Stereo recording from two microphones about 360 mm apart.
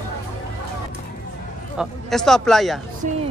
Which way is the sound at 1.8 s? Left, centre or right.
Centre.